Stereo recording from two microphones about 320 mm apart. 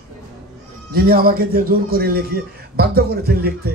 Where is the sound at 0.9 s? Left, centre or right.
Right.